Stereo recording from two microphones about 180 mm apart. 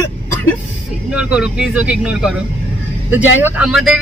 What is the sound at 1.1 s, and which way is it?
Speech, 5° right (ahead or behind).